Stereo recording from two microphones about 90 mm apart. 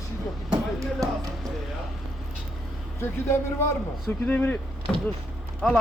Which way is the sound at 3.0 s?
25° left (ahead or behind).